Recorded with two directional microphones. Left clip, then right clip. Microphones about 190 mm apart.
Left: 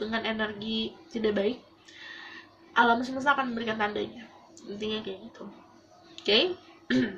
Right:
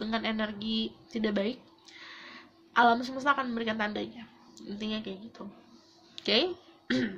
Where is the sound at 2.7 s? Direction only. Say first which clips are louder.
Left 1 dB; 55° right (ahead or behind).